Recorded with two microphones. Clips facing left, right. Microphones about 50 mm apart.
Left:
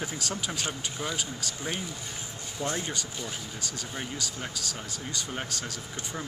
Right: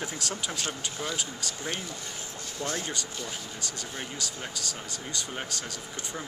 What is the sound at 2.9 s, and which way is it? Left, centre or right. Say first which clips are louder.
Speech: even; centre.